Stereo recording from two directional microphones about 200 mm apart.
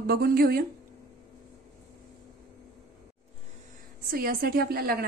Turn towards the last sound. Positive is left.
turn(degrees=-50)  # may be behind; listen again after turning